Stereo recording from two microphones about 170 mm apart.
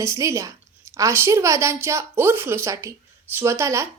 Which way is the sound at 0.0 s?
15° right (ahead or behind).